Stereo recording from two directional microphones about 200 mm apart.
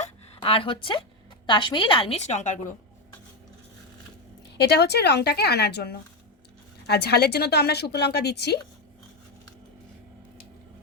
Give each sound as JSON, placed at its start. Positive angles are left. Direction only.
{"t": 0.0, "sound": "a sound", "side_deg": 25}
{"t": 1.5, "sound": "a woman's voice", "side_deg": 25}
{"t": 4.5, "sound": "a woman's voice", "side_deg": 55}